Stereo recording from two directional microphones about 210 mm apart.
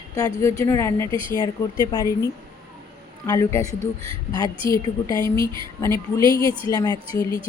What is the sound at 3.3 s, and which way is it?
Speech, 15° left (ahead or behind).